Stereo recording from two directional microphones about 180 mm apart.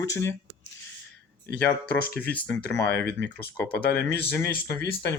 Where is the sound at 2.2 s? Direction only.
10° left (ahead or behind).